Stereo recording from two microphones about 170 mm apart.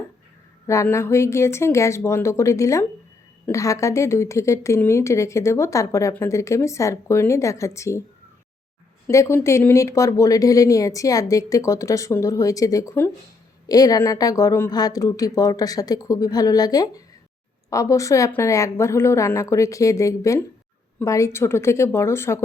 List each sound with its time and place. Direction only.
0.7 s a woman's voice: 15° left (ahead or behind)
9.0 s a woman's voice: 15° left (ahead or behind)